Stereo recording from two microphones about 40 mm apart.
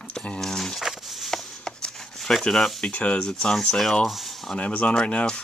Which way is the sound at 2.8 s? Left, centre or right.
Left.